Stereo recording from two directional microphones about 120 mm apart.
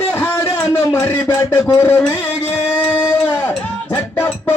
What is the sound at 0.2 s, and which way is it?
A man's voice, 20° left (ahead or behind).